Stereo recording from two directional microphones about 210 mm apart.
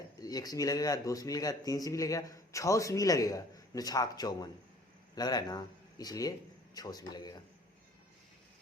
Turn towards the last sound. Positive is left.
turn(degrees=20)  # may be behind; listen again after turning